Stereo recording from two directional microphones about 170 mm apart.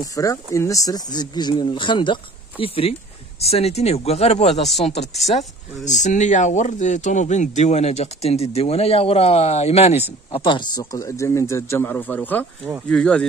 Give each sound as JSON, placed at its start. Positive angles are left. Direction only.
{"t": 0.0, "sound": "a man's voice", "side_deg": 20}